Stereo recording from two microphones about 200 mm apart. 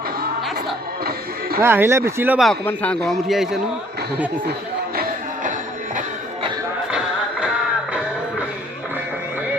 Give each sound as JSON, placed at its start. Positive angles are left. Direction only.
{"t": 1.0, "sound": "music", "side_deg": -50}
{"t": 1.6, "sound": "speech", "side_deg": -10}
{"t": 2.5, "sound": "a man's voice", "side_deg": 5}
{"t": 4.9, "sound": "music", "side_deg": -40}
{"t": 6.9, "sound": "music", "side_deg": -5}